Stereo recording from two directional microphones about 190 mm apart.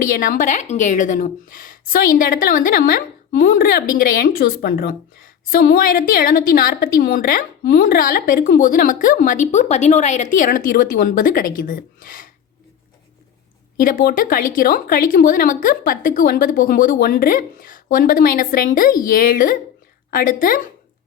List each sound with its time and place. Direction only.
0.1 s a woman's voice: 45° left (ahead or behind)
13.7 s a woman's voice: 50° left (ahead or behind)